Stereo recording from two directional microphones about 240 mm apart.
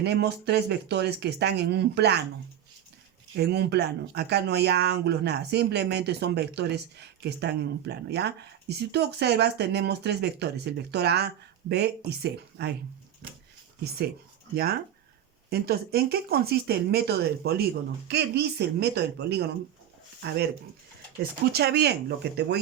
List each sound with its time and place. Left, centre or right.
0.0 s speech: right
3.3 s speech: right
14.5 s speech: right
21.5 s speech: right